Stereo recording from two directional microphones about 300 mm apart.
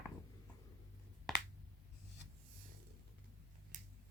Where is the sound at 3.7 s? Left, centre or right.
Right.